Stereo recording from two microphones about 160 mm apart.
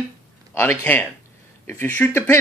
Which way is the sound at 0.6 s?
10° left (ahead or behind).